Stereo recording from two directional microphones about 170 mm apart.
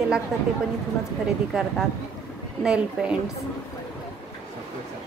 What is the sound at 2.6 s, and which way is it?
Speech, 5° right (ahead or behind).